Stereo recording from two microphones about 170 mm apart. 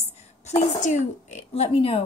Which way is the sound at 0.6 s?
45° left (ahead or behind).